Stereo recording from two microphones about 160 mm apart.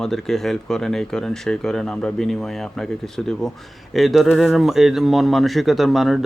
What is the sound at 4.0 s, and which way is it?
Speech, centre (ahead or behind).